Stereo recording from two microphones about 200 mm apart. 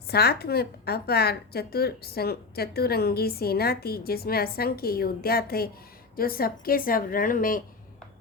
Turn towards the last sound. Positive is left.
turn(degrees=45)  # may be behind; listen again after turning